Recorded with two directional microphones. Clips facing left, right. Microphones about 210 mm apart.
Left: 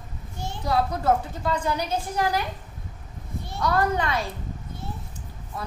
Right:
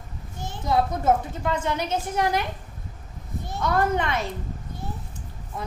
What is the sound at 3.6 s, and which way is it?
Speech, 20° right (ahead or behind).